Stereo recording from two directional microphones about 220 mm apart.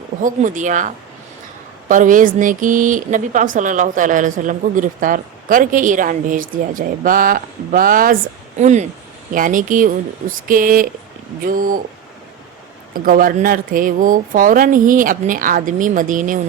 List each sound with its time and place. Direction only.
0.2 s speech: 35° right (ahead or behind)
12.9 s speech: 40° right (ahead or behind)